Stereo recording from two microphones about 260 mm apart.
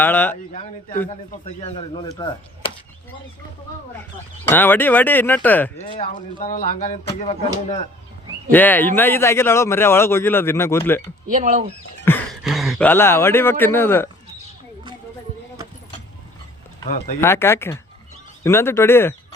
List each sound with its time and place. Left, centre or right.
0.0 s a man's voice: centre
1.6 s speech: centre
4.4 s a man's voice: centre
5.8 s speech: left
8.5 s a man's voice: centre
11.3 s speech: right
12.0 s a man's voice: centre
17.2 s a man's voice: centre